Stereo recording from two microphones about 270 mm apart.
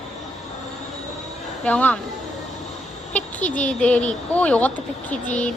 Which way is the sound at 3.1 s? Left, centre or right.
Centre.